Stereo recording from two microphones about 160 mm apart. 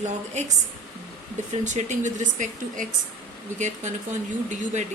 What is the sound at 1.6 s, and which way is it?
Speech, 50° right (ahead or behind).